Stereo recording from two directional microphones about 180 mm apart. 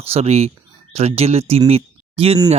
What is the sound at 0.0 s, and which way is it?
Speech, 35° right (ahead or behind).